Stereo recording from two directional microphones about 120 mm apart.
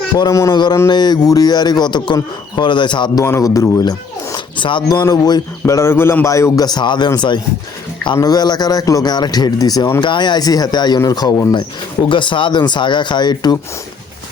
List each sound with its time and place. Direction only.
0.2 s a man's voice: 25° left (ahead or behind)
3.2 s a man's voice: 25° left (ahead or behind)
4.5 s a man's voice: 40° left (ahead or behind)
12.0 s a man's voice: 45° left (ahead or behind)